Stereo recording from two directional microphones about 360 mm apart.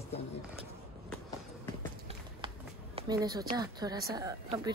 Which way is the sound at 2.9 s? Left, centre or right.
Centre.